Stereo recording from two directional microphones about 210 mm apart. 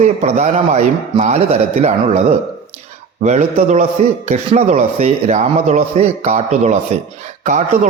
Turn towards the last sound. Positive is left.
turn(degrees=-35)  # may be behind; listen again after turning